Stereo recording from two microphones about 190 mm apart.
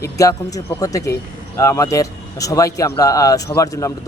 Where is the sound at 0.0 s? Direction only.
15° left (ahead or behind).